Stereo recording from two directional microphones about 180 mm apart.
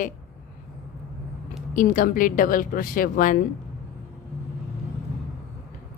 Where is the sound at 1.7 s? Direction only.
45° left (ahead or behind).